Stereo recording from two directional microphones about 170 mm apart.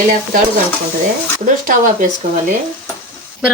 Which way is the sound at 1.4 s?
55° right (ahead or behind).